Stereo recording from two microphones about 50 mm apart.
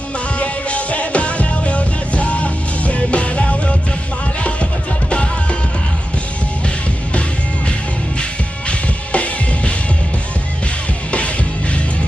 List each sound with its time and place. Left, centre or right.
0.3 s music: left
8.2 s music: left